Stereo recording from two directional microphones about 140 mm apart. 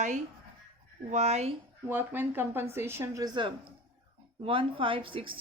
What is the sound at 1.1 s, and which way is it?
Speech, 50° right (ahead or behind).